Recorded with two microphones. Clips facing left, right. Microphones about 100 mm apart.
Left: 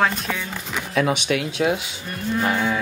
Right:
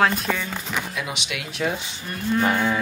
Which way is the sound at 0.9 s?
50° left (ahead or behind).